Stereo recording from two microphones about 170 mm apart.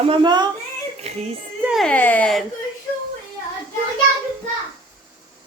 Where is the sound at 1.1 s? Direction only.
40° right (ahead or behind).